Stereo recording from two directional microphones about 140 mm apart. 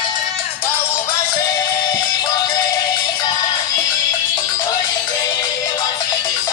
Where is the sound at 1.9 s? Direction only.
30° left (ahead or behind).